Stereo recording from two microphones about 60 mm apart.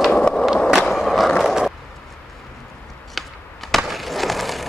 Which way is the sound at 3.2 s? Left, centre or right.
Centre.